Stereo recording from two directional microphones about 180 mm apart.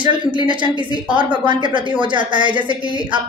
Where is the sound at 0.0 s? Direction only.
25° right (ahead or behind).